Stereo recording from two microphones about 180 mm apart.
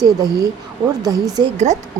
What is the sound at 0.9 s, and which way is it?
Speech, 20° right (ahead or behind).